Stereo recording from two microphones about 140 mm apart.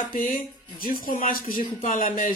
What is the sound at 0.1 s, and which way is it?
Speech, 80° left.